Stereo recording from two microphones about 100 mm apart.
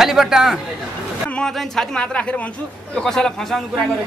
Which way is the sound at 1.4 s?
10° left (ahead or behind).